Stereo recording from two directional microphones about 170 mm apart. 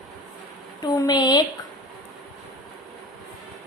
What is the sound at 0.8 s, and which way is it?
Speech, 25° left (ahead or behind).